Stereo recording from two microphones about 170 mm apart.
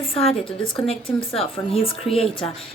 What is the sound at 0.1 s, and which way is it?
A woman's voice, 35° left (ahead or behind).